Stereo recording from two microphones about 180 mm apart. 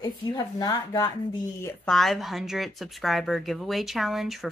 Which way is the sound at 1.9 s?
Centre (ahead or behind).